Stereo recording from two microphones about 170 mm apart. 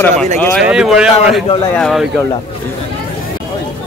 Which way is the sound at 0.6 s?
5° right (ahead or behind).